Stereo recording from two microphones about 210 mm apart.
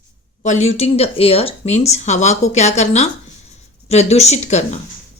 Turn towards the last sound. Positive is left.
turn(degrees=30)  # may be behind; listen again after turning